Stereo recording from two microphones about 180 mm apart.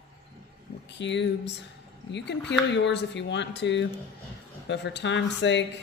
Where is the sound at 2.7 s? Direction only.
75° left (ahead or behind).